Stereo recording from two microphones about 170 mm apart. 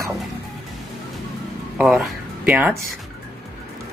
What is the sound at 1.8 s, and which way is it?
Speech, 5° right (ahead or behind).